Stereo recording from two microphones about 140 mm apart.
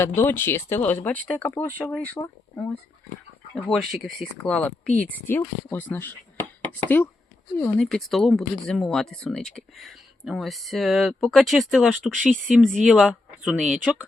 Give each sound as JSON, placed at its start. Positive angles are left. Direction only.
{"t": 0.0, "sound": "speech", "side_deg": 15}
{"t": 3.5, "sound": "speech", "side_deg": 0}